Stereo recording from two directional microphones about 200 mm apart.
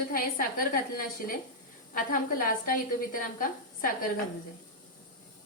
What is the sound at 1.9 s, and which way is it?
A woman's voice, 45° left (ahead or behind).